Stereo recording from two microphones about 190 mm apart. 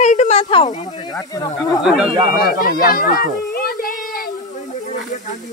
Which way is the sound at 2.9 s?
50° left (ahead or behind).